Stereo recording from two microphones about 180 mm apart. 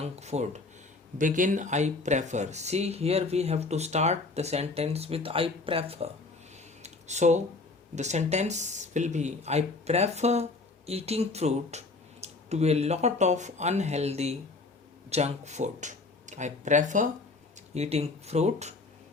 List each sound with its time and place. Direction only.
0.0 s speech: 40° right (ahead or behind)
6.8 s a sound: 40° right (ahead or behind)
7.9 s speech: 40° right (ahead or behind)